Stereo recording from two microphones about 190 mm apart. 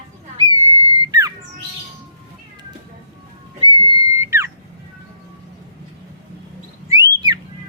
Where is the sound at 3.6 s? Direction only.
15° right (ahead or behind).